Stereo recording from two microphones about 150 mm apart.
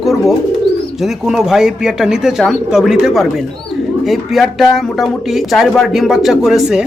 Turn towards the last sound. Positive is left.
turn(degrees=-5)  # may be behind; listen again after turning